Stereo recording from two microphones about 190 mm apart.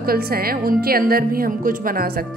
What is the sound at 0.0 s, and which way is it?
A woman's voice, 50° right (ahead or behind).